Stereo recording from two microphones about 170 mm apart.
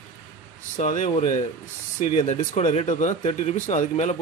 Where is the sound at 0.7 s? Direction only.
45° left (ahead or behind).